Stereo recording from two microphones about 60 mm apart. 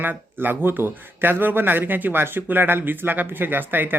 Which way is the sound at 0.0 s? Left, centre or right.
Right.